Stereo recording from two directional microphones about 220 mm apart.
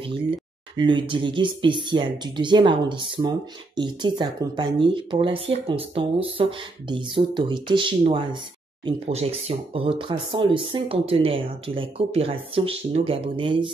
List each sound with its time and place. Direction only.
0.0 s speech: 25° right (ahead or behind)